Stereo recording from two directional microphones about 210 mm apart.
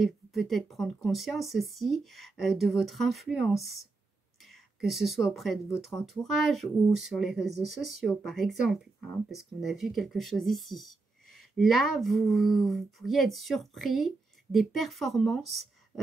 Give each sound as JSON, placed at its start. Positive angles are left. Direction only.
{"t": 0.0, "sound": "speech", "side_deg": 0}